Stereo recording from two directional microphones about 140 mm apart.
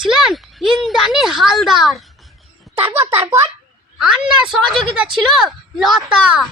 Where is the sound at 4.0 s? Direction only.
5° right (ahead or behind).